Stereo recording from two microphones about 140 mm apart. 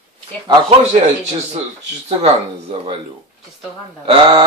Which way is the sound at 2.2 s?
40° right (ahead or behind).